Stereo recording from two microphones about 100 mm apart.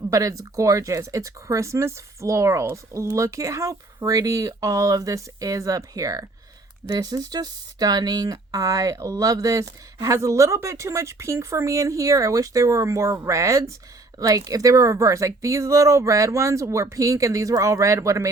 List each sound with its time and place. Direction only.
0.1 s speech: 35° right (ahead or behind)